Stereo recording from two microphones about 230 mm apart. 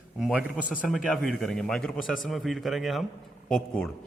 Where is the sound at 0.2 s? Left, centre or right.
Centre.